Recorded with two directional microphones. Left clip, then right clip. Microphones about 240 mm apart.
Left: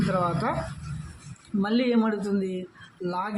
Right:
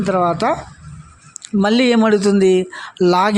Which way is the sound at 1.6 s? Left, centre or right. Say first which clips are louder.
Right 11 dB; right.